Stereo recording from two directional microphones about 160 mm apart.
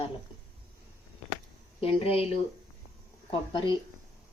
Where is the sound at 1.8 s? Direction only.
35° left (ahead or behind).